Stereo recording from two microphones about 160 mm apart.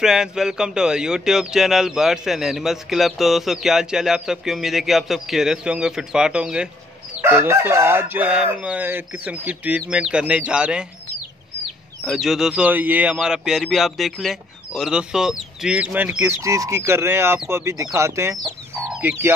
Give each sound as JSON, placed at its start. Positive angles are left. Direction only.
{"t": 0.0, "sound": "speech", "side_deg": -5}
{"t": 7.2, "sound": "chicken", "side_deg": -10}
{"t": 12.0, "sound": "speech", "side_deg": 0}
{"t": 17.5, "sound": "chicken", "side_deg": -15}